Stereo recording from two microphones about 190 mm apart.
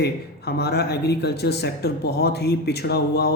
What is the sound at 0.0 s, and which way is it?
Speech, 60° left (ahead or behind).